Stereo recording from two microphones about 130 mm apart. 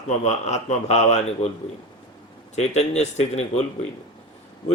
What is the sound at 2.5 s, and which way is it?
A man's voice, 55° left (ahead or behind).